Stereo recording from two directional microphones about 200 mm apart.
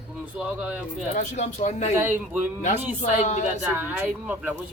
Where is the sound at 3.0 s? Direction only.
35° left (ahead or behind).